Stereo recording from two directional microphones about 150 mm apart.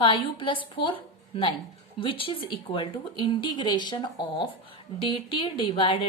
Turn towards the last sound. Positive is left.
turn(degrees=35)  # may be behind; listen again after turning